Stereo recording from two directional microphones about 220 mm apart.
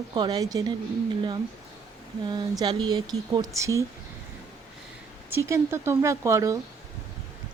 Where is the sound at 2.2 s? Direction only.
20° right (ahead or behind).